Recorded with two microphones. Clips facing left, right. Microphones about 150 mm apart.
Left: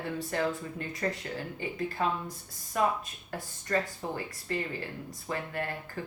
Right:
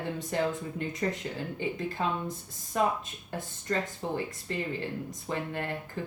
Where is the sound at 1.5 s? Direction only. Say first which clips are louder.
Even; 20° right (ahead or behind).